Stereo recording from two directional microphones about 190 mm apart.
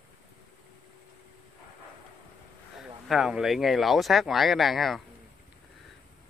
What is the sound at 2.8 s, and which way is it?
Speech, 5° right (ahead or behind).